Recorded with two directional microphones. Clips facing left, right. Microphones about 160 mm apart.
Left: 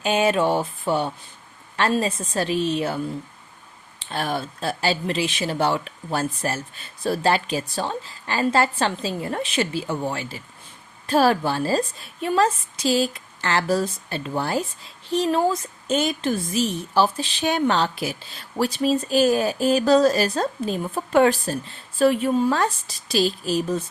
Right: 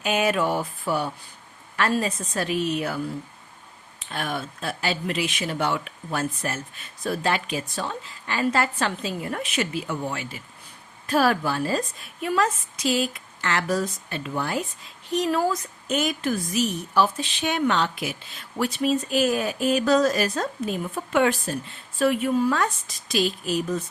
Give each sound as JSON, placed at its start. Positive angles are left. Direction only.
{"t": 0.0, "sound": "a woman's voice", "side_deg": 30}
{"t": 4.0, "sound": "speech", "side_deg": 30}